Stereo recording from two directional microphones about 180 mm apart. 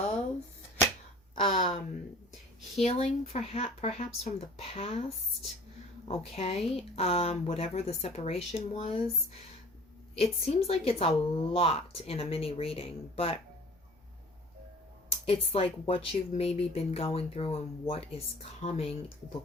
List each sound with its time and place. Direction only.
1.4 s speech: 35° left (ahead or behind)
2.8 s speech: 35° left (ahead or behind)
15.3 s speech: 30° left (ahead or behind)